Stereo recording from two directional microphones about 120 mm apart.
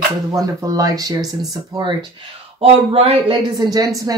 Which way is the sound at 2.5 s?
50° right (ahead or behind).